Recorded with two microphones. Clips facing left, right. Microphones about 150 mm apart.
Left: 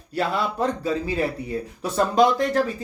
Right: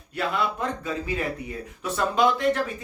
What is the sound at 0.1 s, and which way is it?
Speech, 35° left (ahead or behind).